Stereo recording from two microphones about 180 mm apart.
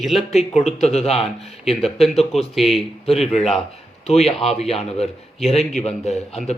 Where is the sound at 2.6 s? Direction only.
Centre (ahead or behind).